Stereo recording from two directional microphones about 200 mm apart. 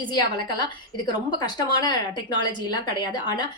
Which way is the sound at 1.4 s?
20° left (ahead or behind).